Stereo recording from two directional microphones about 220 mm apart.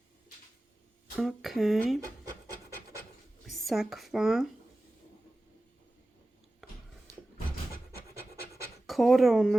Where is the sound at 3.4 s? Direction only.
Centre (ahead or behind).